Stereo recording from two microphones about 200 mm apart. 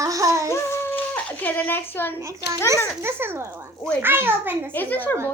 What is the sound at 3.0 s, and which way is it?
A child's voice, 10° right (ahead or behind).